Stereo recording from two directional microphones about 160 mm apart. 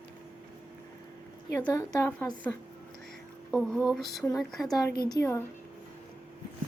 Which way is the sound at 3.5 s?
5° right (ahead or behind).